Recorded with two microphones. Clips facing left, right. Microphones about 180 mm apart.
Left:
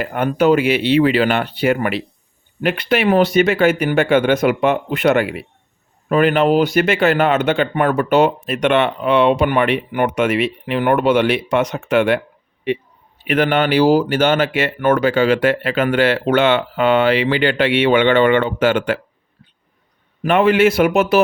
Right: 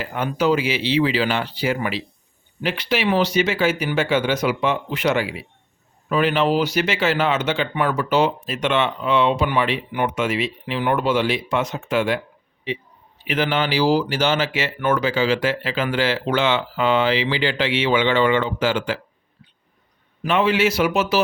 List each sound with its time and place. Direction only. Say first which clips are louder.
0.0 s speech: left 5 dB; 55° left (ahead or behind)
13.2 s speech: left 6 dB; 60° left (ahead or behind)
20.2 s speech: left 6 dB; 55° left (ahead or behind)